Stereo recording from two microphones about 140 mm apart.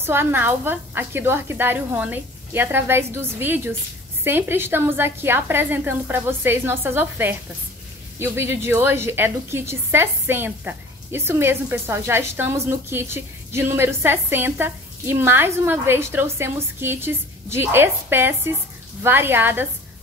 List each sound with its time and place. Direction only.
0.0 s a woman's voice: 15° right (ahead or behind)